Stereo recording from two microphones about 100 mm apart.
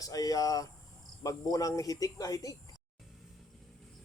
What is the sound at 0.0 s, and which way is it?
Speech, 40° left (ahead or behind).